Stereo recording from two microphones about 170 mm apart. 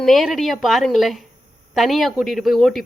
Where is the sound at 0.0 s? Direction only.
Centre (ahead or behind).